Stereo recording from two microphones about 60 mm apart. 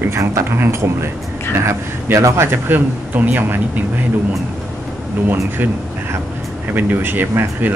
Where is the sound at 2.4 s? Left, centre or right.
Right.